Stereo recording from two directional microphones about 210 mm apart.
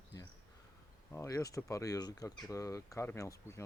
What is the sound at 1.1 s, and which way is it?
Speech, 15° left (ahead or behind).